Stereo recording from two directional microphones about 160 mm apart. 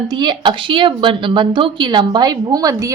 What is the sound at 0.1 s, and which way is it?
Speech, 30° right (ahead or behind).